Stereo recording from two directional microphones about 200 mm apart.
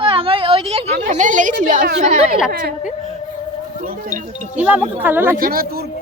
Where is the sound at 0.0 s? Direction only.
25° right (ahead or behind).